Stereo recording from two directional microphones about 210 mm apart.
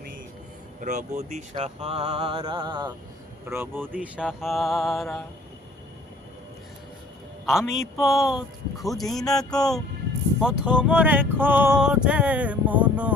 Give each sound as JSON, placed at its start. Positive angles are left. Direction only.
{"t": 0.8, "sound": "speech", "side_deg": -35}
{"t": 3.5, "sound": "speech", "side_deg": -10}
{"t": 7.4, "sound": "a man's voice", "side_deg": 0}
{"t": 10.4, "sound": "a sound", "side_deg": -5}